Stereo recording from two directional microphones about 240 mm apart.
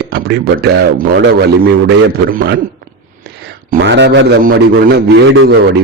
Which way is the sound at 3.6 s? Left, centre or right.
Right.